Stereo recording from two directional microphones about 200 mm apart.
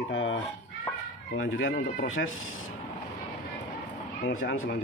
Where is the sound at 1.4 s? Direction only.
70° left (ahead or behind).